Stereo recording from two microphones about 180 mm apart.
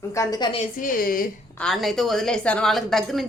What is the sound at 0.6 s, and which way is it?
Speech, 50° left (ahead or behind).